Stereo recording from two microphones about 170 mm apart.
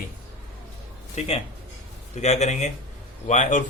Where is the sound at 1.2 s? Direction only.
40° left (ahead or behind).